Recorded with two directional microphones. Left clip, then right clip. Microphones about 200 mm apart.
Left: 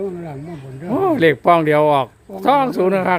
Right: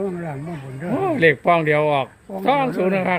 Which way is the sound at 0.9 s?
30° left (ahead or behind).